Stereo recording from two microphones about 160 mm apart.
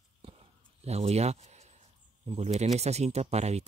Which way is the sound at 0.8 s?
40° right (ahead or behind).